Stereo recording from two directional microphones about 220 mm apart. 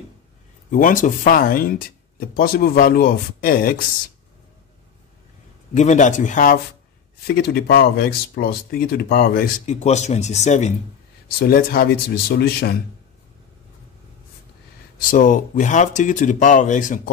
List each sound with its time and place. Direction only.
0.7 s speech: 40° left (ahead or behind)
5.8 s speech: 35° left (ahead or behind)
11.2 s speech: 45° left (ahead or behind)
15.0 s speech: 35° left (ahead or behind)